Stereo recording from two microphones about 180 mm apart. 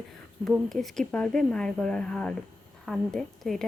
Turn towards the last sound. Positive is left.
turn(degrees=0)  # may be behind; listen again after turning